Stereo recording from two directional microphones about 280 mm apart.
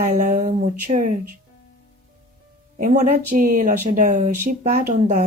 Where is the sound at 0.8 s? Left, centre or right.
Right.